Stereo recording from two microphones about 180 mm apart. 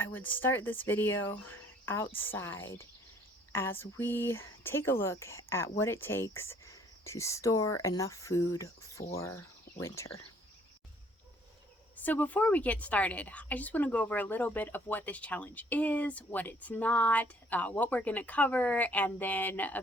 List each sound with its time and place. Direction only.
0.0 s a woman's voice: 10° left (ahead or behind)
11.9 s a woman's voice: 10° left (ahead or behind)